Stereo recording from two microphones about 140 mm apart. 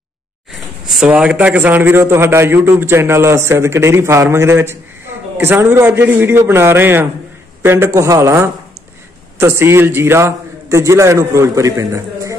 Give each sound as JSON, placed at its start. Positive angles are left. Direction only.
{"t": 0.5, "sound": "a man's voice", "side_deg": -5}